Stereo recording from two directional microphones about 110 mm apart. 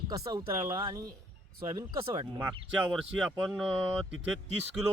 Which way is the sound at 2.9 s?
5° right (ahead or behind).